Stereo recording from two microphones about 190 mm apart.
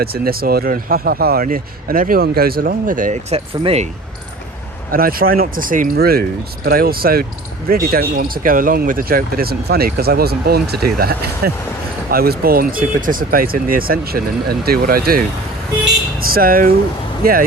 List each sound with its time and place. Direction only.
0.0 s speech: 55° right (ahead or behind); by 3.8 s 30° right (ahead or behind)
4.9 s speech: 50° right (ahead or behind)
16.3 s speech: 50° right (ahead or behind)